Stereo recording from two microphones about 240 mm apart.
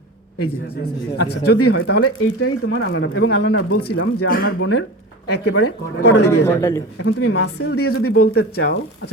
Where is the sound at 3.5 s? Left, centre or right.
Left.